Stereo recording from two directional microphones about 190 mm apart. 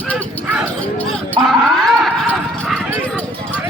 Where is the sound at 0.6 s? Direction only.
5° left (ahead or behind).